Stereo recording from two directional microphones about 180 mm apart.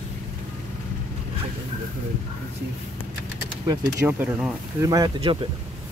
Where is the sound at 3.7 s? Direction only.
15° right (ahead or behind).